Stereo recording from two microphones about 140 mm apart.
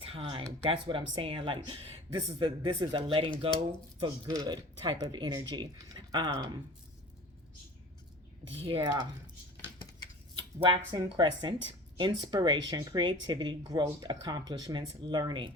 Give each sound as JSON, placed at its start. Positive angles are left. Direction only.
{"t": 0.0, "sound": "speech", "side_deg": -40}
{"t": 4.3, "sound": "speech", "side_deg": -30}
{"t": 8.5, "sound": "speech", "side_deg": -40}
{"t": 10.6, "sound": "speech", "side_deg": -35}